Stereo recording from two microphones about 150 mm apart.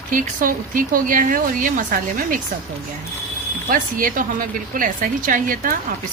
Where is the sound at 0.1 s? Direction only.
60° right (ahead or behind).